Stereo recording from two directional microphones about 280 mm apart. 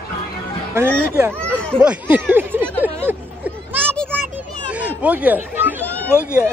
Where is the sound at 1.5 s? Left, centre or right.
Centre.